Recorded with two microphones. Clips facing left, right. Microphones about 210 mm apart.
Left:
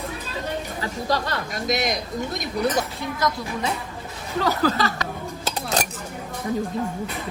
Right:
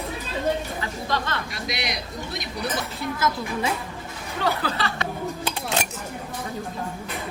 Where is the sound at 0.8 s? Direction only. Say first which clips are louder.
Left 3 dB; 40° left (ahead or behind).